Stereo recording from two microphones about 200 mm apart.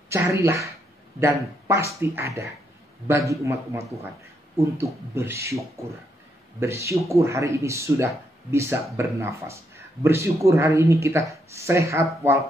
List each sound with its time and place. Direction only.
0.1 s speech: 15° right (ahead or behind)
1.7 s speech: 15° right (ahead or behind)